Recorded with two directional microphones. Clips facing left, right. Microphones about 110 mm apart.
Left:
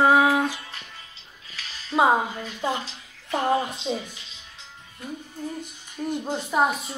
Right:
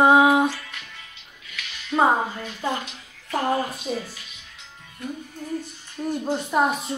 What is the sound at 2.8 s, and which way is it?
Speech, 30° left (ahead or behind).